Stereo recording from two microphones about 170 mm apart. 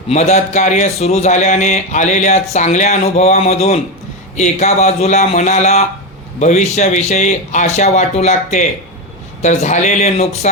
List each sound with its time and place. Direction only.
0.1 s a man's voice: 40° left (ahead or behind)